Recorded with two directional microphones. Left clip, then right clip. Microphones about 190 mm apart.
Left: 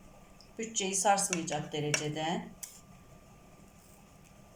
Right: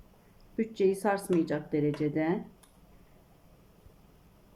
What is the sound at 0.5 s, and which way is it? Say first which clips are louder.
Speech: right 7 dB; 50° right (ahead or behind).